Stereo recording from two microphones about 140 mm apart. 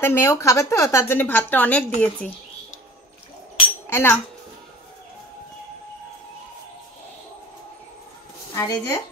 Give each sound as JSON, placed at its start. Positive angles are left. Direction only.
{"t": 0.0, "sound": "a woman's voice", "side_deg": 15}
{"t": 3.9, "sound": "speech", "side_deg": 15}
{"t": 8.5, "sound": "speech", "side_deg": 25}